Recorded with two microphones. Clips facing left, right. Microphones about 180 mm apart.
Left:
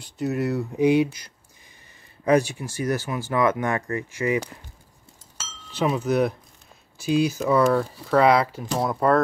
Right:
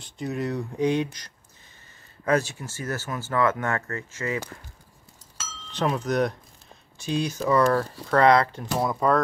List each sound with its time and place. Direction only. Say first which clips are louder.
0.0 s speech: left 4 dB; 5° left (ahead or behind)
5.7 s speech: left 3 dB; 5° left (ahead or behind)